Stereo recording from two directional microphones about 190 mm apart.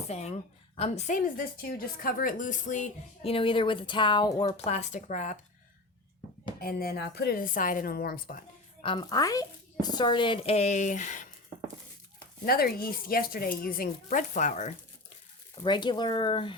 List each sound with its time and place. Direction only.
0.1 s a woman's voice: 35° left (ahead or behind)
6.6 s speech: 55° left (ahead or behind)
8.8 s speech: 25° left (ahead or behind)
12.5 s speech: 50° left (ahead or behind)
15.6 s speech: 25° left (ahead or behind)